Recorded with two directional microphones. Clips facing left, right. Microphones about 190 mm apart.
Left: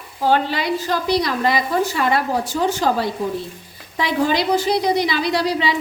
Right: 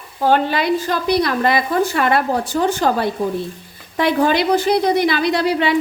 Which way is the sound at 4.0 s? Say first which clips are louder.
Right 3 dB; 60° right (ahead or behind).